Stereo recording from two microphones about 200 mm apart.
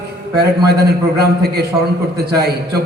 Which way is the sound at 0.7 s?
55° right (ahead or behind).